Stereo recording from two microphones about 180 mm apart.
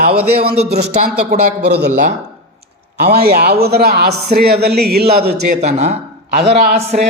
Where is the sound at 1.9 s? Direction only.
45° right (ahead or behind).